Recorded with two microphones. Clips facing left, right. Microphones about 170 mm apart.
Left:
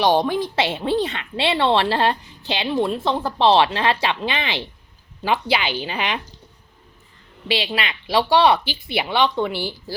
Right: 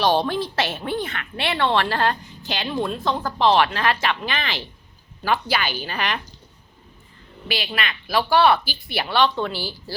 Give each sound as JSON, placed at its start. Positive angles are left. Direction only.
{"t": 0.0, "sound": "speech", "side_deg": 20}
{"t": 7.5, "sound": "speech", "side_deg": 25}